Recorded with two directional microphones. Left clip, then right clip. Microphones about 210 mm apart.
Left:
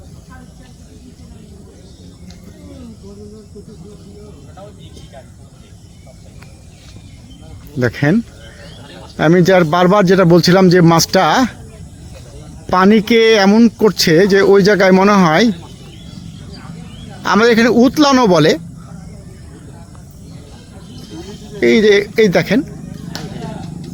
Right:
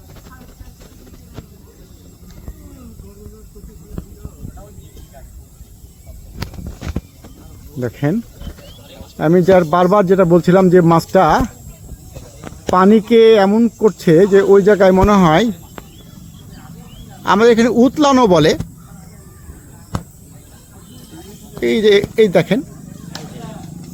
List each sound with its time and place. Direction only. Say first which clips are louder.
7.8 s a man's voice: left 5 dB; 10° left (ahead or behind)
12.7 s a man's voice: even; 10° left (ahead or behind)
13.4 s a man's voice: left 2 dB; 20° left (ahead or behind)
13.9 s speech: left 1 dB; centre (ahead or behind)
14.2 s a man's voice: even; 15° left (ahead or behind)
14.8 s speech: left 1 dB; 5° left (ahead or behind)
17.2 s speech: even; 5° left (ahead or behind)
21.6 s speech: left 2 dB; centre (ahead or behind)